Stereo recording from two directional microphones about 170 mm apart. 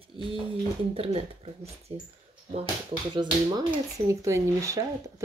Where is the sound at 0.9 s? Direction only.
35° right (ahead or behind).